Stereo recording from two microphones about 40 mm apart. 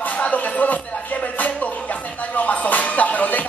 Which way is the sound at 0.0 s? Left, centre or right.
Left.